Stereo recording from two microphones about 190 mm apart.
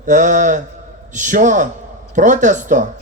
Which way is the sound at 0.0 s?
40° right (ahead or behind).